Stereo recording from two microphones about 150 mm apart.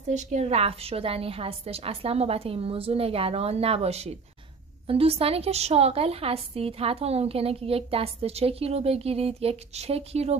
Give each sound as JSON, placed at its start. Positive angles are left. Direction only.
{"t": 0.1, "sound": "a woman's voice", "side_deg": -50}